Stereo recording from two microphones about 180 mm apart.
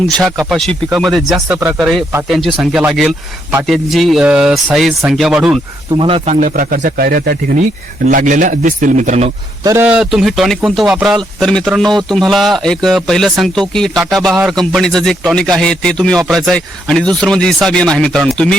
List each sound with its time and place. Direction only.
0.2 s speech: centre (ahead or behind)
5.9 s speech: 30° right (ahead or behind); by 7.7 s 60° right (ahead or behind)
8.0 s speech: 45° right (ahead or behind)
9.6 s speech: 10° right (ahead or behind)